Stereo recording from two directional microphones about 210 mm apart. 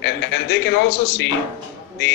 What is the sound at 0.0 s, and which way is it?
A man's voice, 55° left (ahead or behind).